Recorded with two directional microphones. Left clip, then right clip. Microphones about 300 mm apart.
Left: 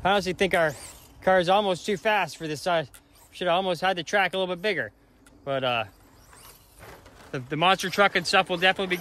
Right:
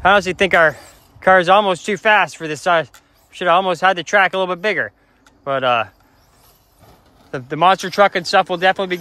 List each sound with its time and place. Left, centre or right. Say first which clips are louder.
0.0 s speech: right 10 dB; right
7.2 s speech: right 8 dB; centre